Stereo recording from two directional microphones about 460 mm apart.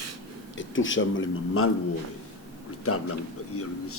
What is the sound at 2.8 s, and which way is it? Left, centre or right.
Speech, left.